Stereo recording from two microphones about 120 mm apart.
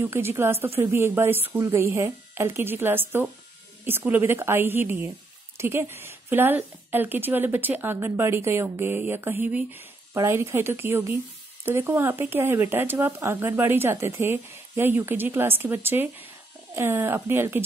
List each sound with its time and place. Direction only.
0.0 s a woman's voice: 20° right (ahead or behind)